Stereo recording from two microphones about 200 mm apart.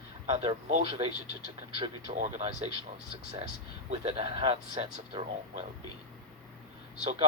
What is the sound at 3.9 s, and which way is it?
Speech, 30° right (ahead or behind).